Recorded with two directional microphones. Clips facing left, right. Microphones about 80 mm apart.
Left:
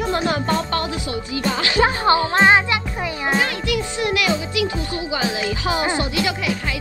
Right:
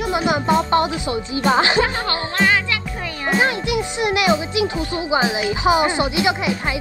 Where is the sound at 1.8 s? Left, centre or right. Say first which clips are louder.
Left 6 dB; left.